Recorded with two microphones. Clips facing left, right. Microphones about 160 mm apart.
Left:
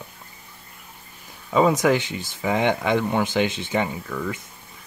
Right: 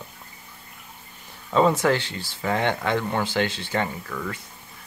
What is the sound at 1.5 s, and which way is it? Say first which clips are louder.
Speech: left 1 dB; 10° left (ahead or behind).